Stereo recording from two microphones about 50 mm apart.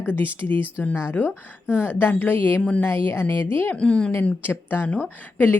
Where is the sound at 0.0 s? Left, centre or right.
Left.